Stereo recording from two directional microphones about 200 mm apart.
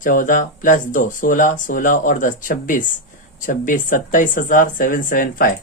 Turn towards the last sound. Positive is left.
turn(degrees=40)  # may be behind; listen again after turning